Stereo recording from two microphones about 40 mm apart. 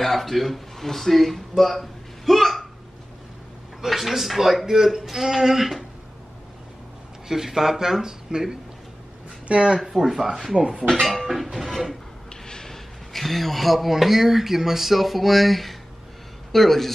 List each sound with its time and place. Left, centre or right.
0.0 s speech: centre
1.6 s a sound: centre
3.8 s a man's voice: centre
7.2 s a man's voice: centre
9.8 s a man's voice: centre
12.3 s speech: centre